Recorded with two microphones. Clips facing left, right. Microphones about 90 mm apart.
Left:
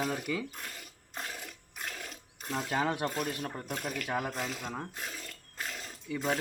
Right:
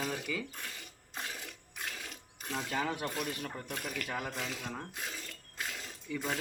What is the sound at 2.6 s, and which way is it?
Speech, 40° left (ahead or behind).